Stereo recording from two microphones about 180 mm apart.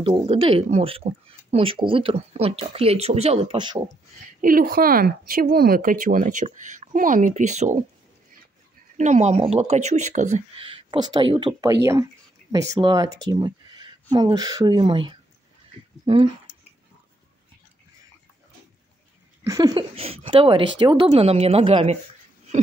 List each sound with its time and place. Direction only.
0.0 s speech: 30° right (ahead or behind)
4.4 s speech: 50° right (ahead or behind)
8.9 s a woman's voice: 40° right (ahead or behind)
19.4 s a woman's voice: 20° right (ahead or behind)